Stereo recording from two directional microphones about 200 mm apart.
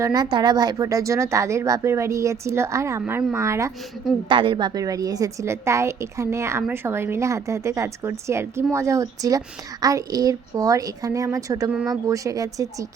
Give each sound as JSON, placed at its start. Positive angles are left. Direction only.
{"t": 0.0, "sound": "a woman's voice", "side_deg": -20}
{"t": 4.3, "sound": "a woman's voice", "side_deg": -25}